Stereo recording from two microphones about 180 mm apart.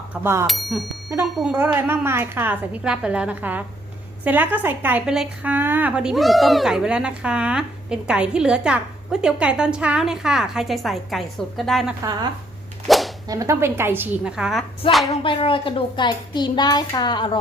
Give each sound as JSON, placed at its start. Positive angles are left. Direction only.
{"t": 0.1, "sound": "a woman's voice", "side_deg": -10}
{"t": 0.4, "sound": "a woman's voice", "side_deg": 0}
{"t": 13.2, "sound": "a woman's voice", "side_deg": -20}
{"t": 15.1, "sound": "speech", "side_deg": 30}